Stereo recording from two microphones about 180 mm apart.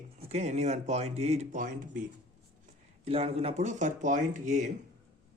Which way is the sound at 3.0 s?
35° right (ahead or behind).